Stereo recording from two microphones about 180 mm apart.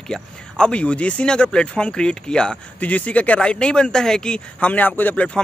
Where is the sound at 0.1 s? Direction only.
5° left (ahead or behind).